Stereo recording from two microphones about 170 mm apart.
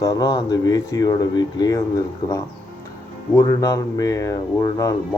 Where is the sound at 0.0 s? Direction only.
25° left (ahead or behind).